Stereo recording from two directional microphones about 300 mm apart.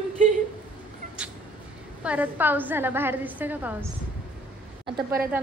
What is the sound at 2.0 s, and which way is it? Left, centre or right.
A woman's voice, centre.